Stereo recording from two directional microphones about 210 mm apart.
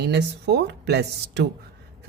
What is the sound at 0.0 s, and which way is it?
Speech, 55° right (ahead or behind).